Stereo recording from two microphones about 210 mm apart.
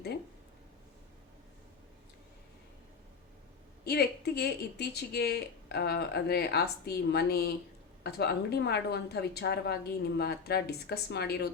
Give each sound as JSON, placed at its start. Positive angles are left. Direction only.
{"t": 3.8, "sound": "speech", "side_deg": 50}